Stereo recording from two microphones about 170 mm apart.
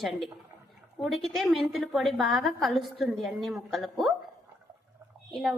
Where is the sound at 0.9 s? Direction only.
Centre (ahead or behind).